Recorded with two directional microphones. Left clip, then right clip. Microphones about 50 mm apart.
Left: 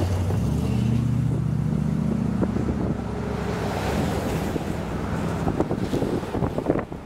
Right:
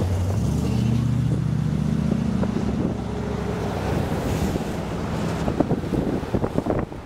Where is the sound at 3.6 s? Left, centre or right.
Centre.